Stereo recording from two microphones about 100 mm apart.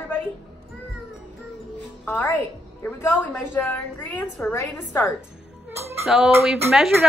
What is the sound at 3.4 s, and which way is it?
A woman's voice, 20° left (ahead or behind).